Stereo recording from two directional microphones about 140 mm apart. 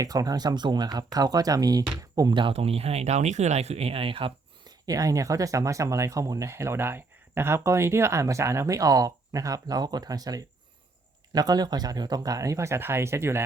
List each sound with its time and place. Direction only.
0.0 s speech: 25° right (ahead or behind)
4.9 s speech: 25° right (ahead or behind)